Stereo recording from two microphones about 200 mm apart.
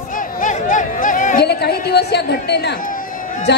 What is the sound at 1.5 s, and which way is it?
A woman's voice, 55° left (ahead or behind).